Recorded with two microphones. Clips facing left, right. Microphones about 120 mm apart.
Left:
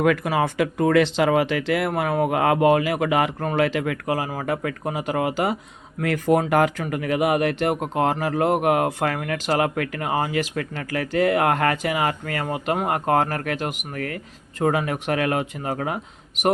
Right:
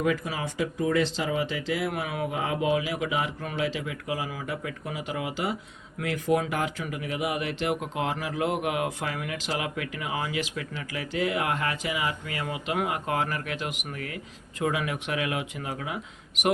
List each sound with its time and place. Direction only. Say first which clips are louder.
0.0 s speech: left 8 dB; 65° left (ahead or behind)
2.0 s speech: left 9 dB; 55° left (ahead or behind)
6.5 s speech: left 10 dB; 65° left (ahead or behind)